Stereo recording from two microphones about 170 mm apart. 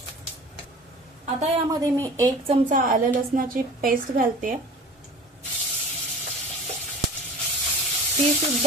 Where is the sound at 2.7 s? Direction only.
55° right (ahead or behind).